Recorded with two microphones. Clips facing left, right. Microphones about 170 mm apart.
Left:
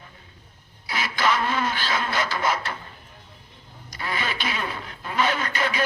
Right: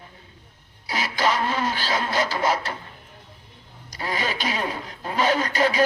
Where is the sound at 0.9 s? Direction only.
35° right (ahead or behind).